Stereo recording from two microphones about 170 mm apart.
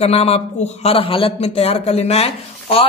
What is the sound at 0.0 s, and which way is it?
A man's voice, 35° left (ahead or behind).